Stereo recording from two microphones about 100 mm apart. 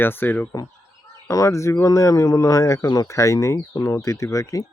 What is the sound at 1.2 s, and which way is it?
Speech, 30° left (ahead or behind).